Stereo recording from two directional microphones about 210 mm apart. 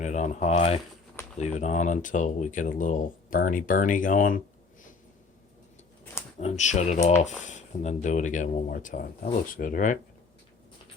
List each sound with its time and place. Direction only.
0.0 s speech: 35° left (ahead or behind)
6.4 s speech: 35° left (ahead or behind)